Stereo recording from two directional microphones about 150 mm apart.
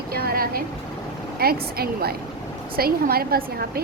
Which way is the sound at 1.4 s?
90° right.